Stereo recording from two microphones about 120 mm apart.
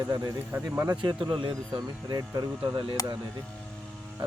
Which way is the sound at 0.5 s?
15° right (ahead or behind).